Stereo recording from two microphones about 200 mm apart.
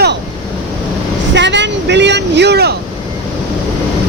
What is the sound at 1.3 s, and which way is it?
Vehicle, 60° right (ahead or behind).